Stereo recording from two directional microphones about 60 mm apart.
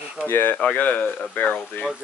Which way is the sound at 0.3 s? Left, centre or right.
Left.